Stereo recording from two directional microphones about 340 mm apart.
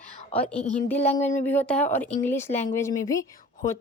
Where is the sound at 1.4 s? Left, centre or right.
Centre.